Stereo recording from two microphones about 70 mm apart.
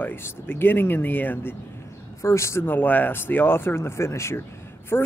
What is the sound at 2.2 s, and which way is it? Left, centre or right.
Speech, left.